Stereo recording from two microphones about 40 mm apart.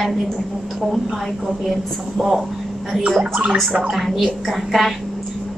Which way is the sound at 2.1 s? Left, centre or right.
Centre.